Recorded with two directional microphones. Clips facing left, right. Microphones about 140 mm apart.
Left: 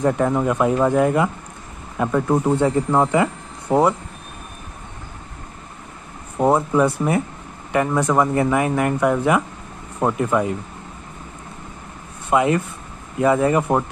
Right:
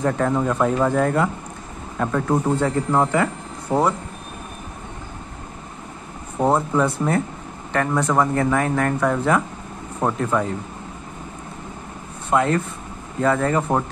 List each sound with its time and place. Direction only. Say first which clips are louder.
0.0 s speech: left 2 dB; 15° left (ahead or behind)
6.4 s speech: left 2 dB; 10° left (ahead or behind)
12.3 s speech: left 2 dB; 10° left (ahead or behind)